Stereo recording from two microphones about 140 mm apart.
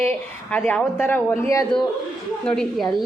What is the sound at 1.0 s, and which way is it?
Speech, 15° left (ahead or behind).